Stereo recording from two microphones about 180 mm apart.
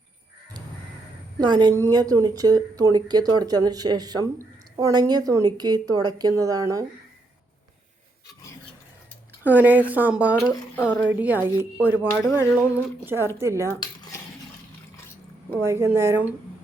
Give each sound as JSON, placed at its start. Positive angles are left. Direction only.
{"t": 1.4, "sound": "a woman's voice", "side_deg": -25}
{"t": 9.4, "sound": "speech", "side_deg": -10}
{"t": 15.6, "sound": "speech", "side_deg": -15}